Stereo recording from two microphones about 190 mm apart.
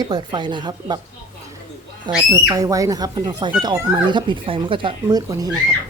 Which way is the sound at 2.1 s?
25° right (ahead or behind).